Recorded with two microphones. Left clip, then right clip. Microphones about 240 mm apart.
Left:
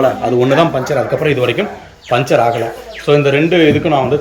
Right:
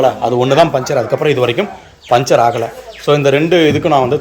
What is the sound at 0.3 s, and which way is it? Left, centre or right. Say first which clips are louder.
A man's voice: right 1 dB; centre.